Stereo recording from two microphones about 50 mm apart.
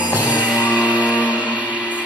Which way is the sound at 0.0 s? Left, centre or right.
Right.